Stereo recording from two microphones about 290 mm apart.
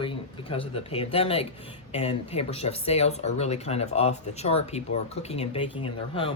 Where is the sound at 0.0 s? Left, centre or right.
Centre.